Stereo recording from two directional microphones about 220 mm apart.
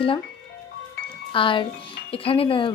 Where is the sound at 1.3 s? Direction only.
25° left (ahead or behind).